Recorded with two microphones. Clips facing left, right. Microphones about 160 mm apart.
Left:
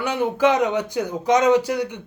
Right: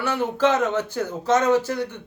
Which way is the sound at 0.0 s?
15° left (ahead or behind).